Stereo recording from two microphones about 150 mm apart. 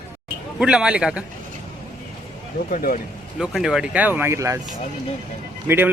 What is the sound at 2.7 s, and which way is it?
Speech, 75° left (ahead or behind).